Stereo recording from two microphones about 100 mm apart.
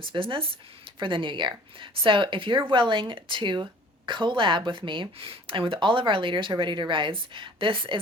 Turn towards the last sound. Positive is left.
turn(degrees=-60)  # may be behind; listen again after turning